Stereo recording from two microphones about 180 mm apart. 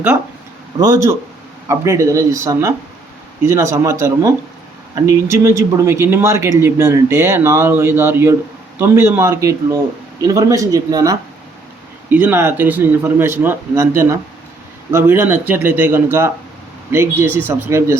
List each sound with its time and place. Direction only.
0.8 s speech: 20° right (ahead or behind)